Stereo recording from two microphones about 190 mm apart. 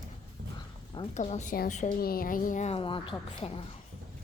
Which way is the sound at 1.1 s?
40° left (ahead or behind).